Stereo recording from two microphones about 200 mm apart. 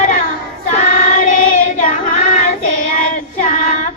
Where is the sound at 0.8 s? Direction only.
40° left (ahead or behind).